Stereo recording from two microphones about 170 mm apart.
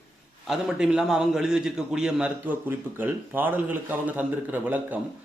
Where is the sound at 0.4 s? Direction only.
5° right (ahead or behind).